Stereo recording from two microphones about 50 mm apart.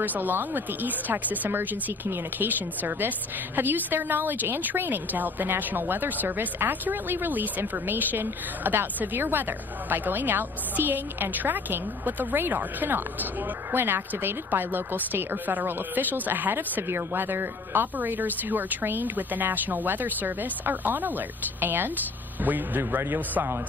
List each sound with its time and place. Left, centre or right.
0.0 s a woman's voice: right